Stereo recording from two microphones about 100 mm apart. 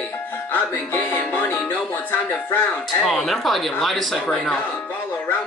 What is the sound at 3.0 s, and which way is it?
Speech, centre (ahead or behind).